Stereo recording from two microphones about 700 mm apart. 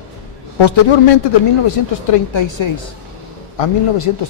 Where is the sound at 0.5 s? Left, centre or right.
Left.